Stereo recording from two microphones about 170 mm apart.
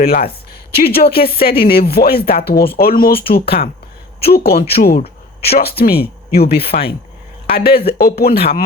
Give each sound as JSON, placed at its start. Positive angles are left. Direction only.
{"t": 0.0, "sound": "speech", "side_deg": 60}
{"t": 3.1, "sound": "speech", "side_deg": 35}
{"t": 3.3, "sound": "speech", "side_deg": 65}